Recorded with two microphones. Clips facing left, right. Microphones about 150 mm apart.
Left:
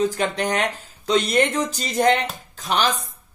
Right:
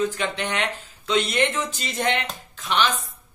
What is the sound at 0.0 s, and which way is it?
Speech, 40° left (ahead or behind).